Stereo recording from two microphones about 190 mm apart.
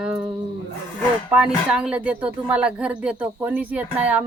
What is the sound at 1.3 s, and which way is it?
Speech, 5° right (ahead or behind).